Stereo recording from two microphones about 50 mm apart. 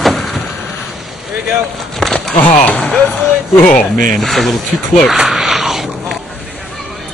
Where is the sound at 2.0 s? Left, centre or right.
Centre.